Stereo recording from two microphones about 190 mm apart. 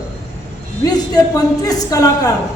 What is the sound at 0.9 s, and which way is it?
A woman's voice, 20° left (ahead or behind).